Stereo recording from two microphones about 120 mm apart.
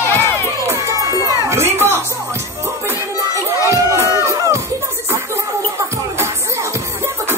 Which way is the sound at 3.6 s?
25° right (ahead or behind).